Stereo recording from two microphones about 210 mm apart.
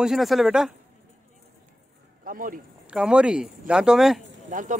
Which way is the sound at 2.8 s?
5° right (ahead or behind).